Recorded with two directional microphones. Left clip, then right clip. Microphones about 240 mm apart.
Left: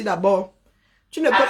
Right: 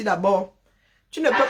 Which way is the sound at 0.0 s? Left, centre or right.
Centre.